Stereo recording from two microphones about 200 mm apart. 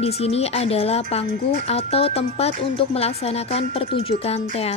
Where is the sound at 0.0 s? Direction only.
30° left (ahead or behind).